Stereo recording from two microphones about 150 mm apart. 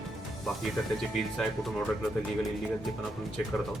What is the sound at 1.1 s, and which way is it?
Speech, centre (ahead or behind).